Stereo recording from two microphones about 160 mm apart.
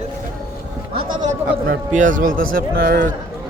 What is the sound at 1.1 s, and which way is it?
A man's voice, 50° right (ahead or behind).